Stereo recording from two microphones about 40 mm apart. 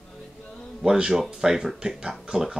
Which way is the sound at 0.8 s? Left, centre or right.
Centre.